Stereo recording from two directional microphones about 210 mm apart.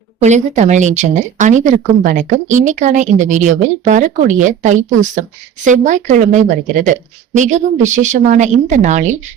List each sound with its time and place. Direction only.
0.2 s speech: 35° right (ahead or behind)